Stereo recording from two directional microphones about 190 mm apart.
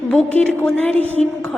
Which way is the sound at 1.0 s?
35° right (ahead or behind).